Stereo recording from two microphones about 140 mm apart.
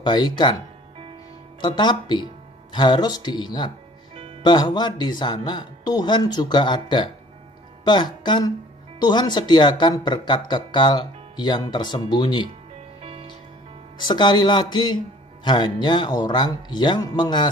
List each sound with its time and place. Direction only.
0.0 s speech: 30° left (ahead or behind)
1.6 s a woman's voice: 35° left (ahead or behind)
13.9 s speech: 30° left (ahead or behind)